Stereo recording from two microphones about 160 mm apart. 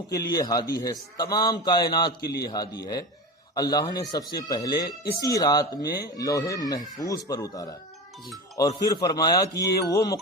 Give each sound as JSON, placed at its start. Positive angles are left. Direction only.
{"t": 0.1, "sound": "a man's voice", "side_deg": 25}